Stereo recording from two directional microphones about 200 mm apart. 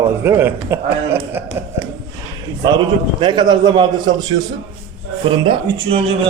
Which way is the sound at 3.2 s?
25° right (ahead or behind).